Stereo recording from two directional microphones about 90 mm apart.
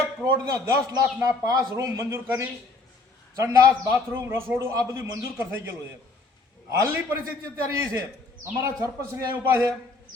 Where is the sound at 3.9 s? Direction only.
25° right (ahead or behind).